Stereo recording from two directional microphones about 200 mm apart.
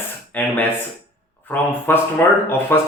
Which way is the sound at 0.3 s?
10° left (ahead or behind).